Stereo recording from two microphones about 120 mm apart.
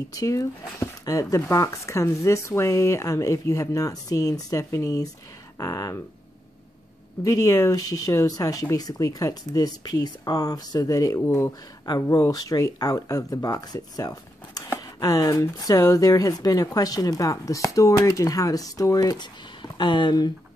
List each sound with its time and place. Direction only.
0.1 s speech: 30° left (ahead or behind)
7.2 s speech: 30° left (ahead or behind)